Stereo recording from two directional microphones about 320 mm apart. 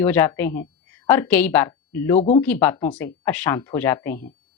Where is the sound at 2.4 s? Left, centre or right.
Centre.